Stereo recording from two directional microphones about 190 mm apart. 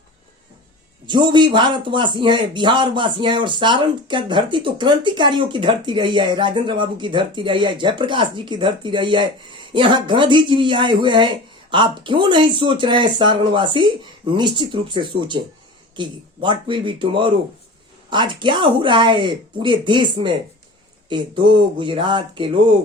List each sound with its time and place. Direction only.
1.0 s speech: 25° right (ahead or behind)